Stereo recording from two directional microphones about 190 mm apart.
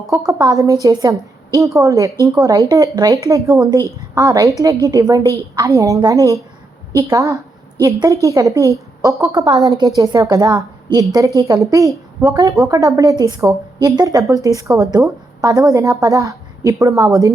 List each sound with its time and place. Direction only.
0.3 s a woman's voice: 20° right (ahead or behind)